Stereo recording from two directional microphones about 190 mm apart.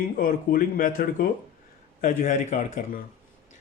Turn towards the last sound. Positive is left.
turn(degrees=40)  # may be behind; listen again after turning